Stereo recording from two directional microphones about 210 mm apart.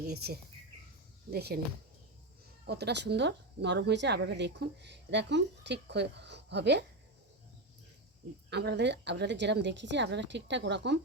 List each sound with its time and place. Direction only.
0.1 s speech: 50° right (ahead or behind)
2.6 s a woman's voice: 50° right (ahead or behind)
8.4 s a woman's voice: 55° right (ahead or behind)